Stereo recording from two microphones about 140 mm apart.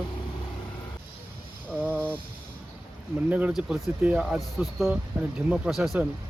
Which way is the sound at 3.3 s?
10° right (ahead or behind).